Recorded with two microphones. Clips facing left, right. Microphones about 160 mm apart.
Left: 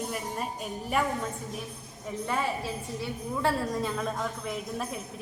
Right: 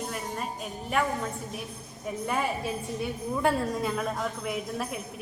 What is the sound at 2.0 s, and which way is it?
A woman's voice, 15° right (ahead or behind).